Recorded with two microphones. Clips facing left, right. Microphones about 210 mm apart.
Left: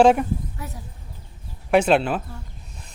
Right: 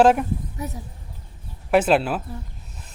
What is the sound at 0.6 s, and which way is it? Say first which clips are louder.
Speech: right 5 dB; 20° right (ahead or behind).